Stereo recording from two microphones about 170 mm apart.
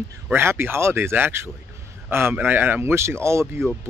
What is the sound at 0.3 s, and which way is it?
Speech, 15° right (ahead or behind).